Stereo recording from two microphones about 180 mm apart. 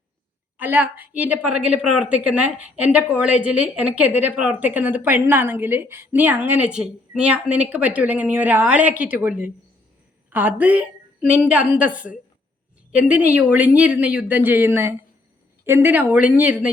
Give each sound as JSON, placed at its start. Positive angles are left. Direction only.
{"t": 0.6, "sound": "a woman's voice", "side_deg": -10}